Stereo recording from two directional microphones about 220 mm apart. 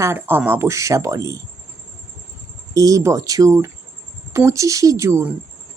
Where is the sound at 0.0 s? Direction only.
10° right (ahead or behind).